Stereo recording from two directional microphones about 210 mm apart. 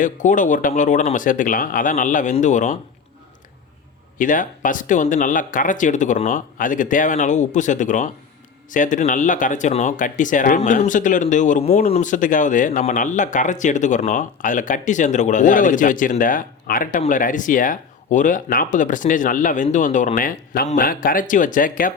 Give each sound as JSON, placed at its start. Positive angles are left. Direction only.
{"t": 0.0, "sound": "speech", "side_deg": 40}
{"t": 4.2, "sound": "speech", "side_deg": 40}